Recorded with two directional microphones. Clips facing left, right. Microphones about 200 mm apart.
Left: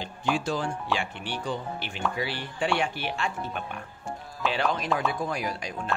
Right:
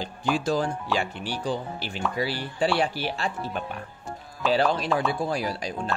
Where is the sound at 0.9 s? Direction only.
35° right (ahead or behind).